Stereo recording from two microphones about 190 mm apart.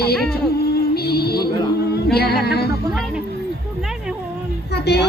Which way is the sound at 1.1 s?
55° left (ahead or behind).